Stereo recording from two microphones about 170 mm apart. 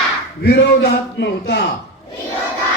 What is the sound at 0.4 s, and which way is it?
A man's voice, 85° left.